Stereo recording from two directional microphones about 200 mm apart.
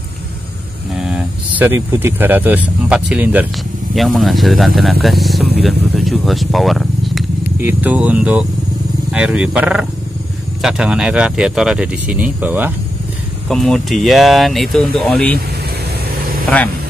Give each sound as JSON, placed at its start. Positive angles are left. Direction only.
{"t": 0.9, "sound": "speech", "side_deg": -5}
{"t": 13.5, "sound": "speech", "side_deg": 0}
{"t": 16.4, "sound": "speech", "side_deg": 5}